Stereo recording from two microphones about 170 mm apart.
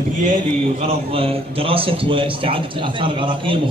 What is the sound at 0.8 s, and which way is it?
A man's voice, 35° right (ahead or behind).